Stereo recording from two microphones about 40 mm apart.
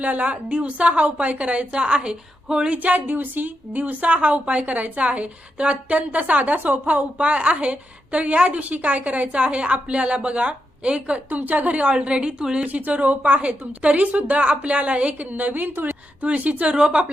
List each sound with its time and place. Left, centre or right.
0.0 s a woman's voice: right
2.7 s a woman's voice: right
11.3 s a woman's voice: right
12.6 s a woman's voice: right
16.2 s a woman's voice: right
16.7 s a woman's voice: right